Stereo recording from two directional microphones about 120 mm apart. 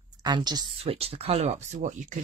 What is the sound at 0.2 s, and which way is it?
Speech, 35° right (ahead or behind).